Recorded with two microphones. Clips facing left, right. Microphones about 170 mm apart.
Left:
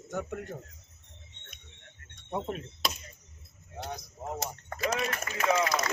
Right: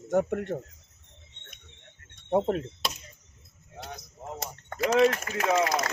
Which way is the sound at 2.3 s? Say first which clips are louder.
Right 9 dB; 60° right (ahead or behind).